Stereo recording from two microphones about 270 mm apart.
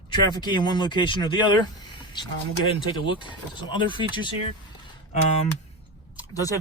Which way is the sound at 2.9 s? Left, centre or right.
Centre.